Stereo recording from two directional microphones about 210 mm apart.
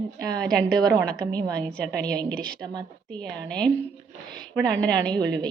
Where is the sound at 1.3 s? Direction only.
15° right (ahead or behind).